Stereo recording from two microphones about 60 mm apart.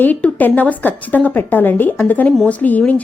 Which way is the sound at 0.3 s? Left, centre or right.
Left.